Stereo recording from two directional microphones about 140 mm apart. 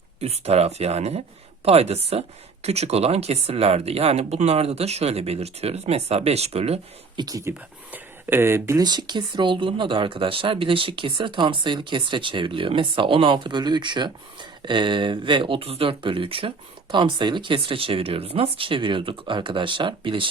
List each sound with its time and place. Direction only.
0.2 s speech: 50° right (ahead or behind)
7.2 s speech: 25° right (ahead or behind)